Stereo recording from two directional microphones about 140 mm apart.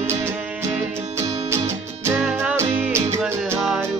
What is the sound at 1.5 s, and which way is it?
Music, 20° right (ahead or behind).